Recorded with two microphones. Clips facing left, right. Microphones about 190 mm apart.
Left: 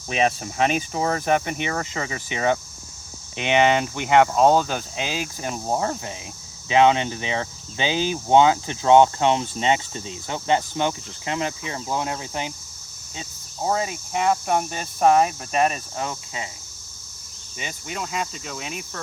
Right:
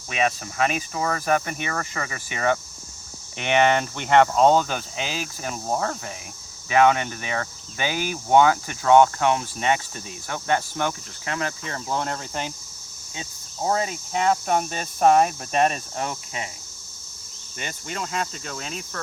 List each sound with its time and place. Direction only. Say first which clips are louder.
0.1 s speech: left 2 dB; 30° left (ahead or behind); by 12.5 s 10° left (ahead or behind)
13.6 s speech: even; 5° left (ahead or behind)
17.6 s speech: even; 5° left (ahead or behind)